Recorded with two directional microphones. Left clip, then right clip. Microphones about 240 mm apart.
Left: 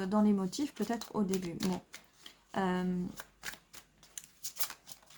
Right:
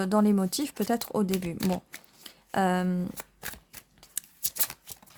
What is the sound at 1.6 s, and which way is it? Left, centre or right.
Speech, right.